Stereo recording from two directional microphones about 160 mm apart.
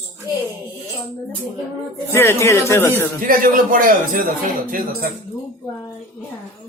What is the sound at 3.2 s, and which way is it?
Speech, 60° right (ahead or behind).